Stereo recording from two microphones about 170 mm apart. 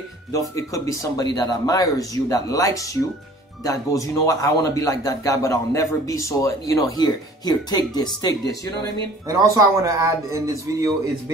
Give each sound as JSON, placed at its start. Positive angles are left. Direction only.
{"t": 0.3, "sound": "a man's voice", "side_deg": 20}
{"t": 9.3, "sound": "a man's voice", "side_deg": -20}